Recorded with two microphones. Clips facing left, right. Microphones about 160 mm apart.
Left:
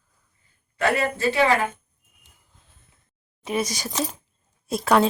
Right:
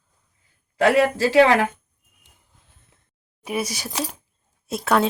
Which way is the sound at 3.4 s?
10° right (ahead or behind).